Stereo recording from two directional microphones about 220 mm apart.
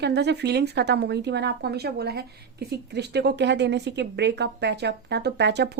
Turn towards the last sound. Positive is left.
turn(degrees=-50)  # may be behind; listen again after turning